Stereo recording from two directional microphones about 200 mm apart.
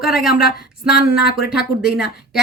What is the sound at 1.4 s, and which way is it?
A woman's voice, 5° right (ahead or behind).